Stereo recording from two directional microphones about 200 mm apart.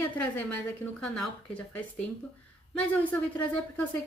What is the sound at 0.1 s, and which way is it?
Speech, 5° left (ahead or behind).